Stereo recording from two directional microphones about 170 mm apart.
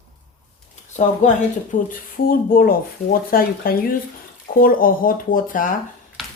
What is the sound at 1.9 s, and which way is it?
Speech, 55° left (ahead or behind).